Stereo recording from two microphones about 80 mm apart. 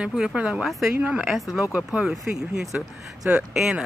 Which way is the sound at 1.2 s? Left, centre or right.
Centre.